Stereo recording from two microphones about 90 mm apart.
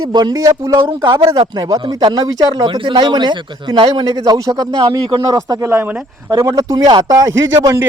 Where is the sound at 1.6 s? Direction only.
45° right (ahead or behind).